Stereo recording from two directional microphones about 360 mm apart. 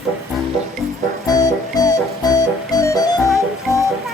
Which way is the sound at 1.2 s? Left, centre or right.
Centre.